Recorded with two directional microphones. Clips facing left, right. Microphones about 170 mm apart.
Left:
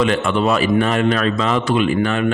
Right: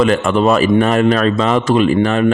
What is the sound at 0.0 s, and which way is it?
Speech, 45° right (ahead or behind).